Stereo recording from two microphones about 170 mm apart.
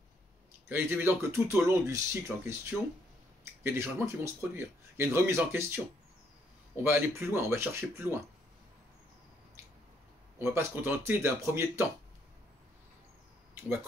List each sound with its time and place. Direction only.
0.7 s speech: 15° right (ahead or behind)
6.8 s speech: 15° right (ahead or behind)
10.4 s speech: 15° right (ahead or behind)